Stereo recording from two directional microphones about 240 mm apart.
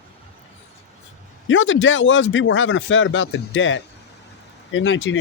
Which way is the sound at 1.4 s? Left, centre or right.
Left.